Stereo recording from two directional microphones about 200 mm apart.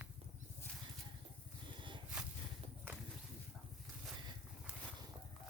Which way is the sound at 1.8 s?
25° right (ahead or behind).